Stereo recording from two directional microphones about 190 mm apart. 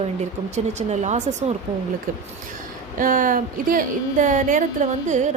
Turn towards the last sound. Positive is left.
turn(degrees=-40)  # may be behind; listen again after turning